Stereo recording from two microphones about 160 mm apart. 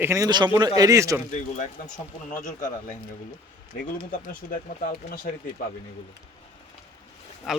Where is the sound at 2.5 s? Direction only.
50° left (ahead or behind).